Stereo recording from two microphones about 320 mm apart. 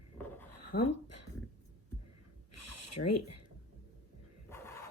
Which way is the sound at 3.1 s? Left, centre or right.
Left.